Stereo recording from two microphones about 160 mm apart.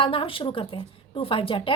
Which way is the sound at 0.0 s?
35° left (ahead or behind).